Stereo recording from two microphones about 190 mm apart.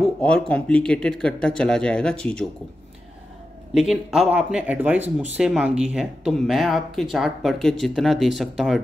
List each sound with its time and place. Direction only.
0.0 s a sound: 5° left (ahead or behind)
0.5 s speech: 5° left (ahead or behind)
3.7 s speech: centre (ahead or behind)